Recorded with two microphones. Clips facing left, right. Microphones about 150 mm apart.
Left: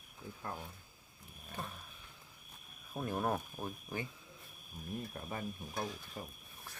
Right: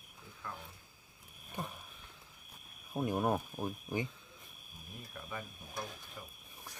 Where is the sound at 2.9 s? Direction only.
15° right (ahead or behind).